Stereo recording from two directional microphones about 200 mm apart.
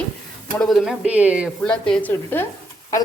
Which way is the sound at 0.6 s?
Centre (ahead or behind).